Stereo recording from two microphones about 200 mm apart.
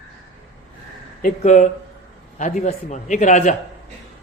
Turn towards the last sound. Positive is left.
turn(degrees=35)  # may be behind; listen again after turning